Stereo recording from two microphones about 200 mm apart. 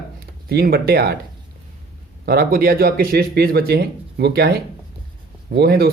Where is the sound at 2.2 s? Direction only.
50° right (ahead or behind).